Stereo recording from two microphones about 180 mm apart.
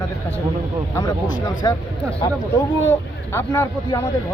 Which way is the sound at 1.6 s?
20° left (ahead or behind).